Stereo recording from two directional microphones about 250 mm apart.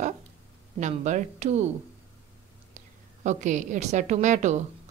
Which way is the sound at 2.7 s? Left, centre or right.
Right.